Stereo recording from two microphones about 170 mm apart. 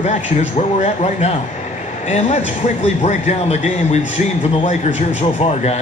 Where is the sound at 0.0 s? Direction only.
45° left (ahead or behind).